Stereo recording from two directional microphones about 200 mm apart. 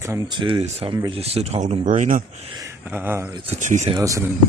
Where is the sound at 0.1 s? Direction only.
25° right (ahead or behind).